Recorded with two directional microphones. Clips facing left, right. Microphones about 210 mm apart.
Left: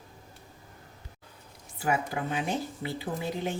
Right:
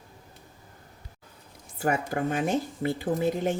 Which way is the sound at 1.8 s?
50° right (ahead or behind).